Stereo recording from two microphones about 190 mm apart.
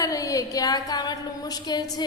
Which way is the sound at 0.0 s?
20° left (ahead or behind).